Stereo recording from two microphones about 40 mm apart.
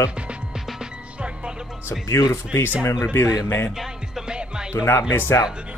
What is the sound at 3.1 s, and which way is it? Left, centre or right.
Speech, left.